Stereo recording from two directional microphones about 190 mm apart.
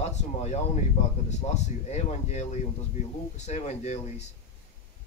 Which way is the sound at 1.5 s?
35° left (ahead or behind).